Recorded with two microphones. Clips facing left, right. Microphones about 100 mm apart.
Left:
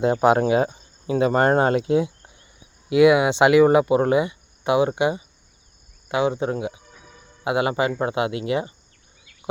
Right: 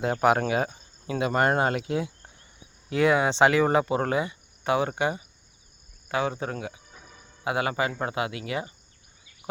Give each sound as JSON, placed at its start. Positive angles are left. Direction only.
{"t": 0.0, "sound": "speech", "side_deg": 25}
{"t": 2.9, "sound": "speech", "side_deg": 10}